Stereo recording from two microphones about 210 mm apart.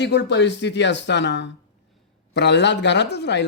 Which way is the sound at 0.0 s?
55° left (ahead or behind).